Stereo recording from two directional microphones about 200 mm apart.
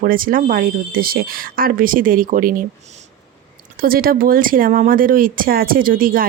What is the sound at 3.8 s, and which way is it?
A woman's voice, 45° right (ahead or behind).